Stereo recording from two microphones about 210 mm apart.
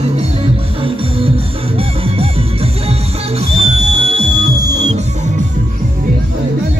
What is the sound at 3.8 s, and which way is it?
Music, 30° right (ahead or behind).